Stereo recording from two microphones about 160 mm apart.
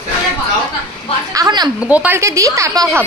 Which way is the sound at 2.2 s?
20° right (ahead or behind).